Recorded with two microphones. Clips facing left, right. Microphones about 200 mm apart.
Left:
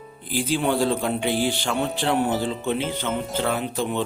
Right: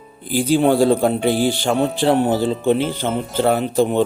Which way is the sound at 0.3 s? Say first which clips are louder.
Right 8 dB; 40° right (ahead or behind).